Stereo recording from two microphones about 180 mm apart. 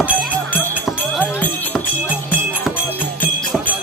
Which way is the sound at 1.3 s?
10° left (ahead or behind).